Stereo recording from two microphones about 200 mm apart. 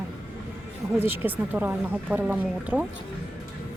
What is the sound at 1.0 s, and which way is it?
Speech, 10° right (ahead or behind).